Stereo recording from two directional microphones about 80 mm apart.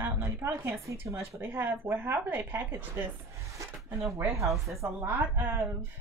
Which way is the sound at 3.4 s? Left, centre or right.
Right.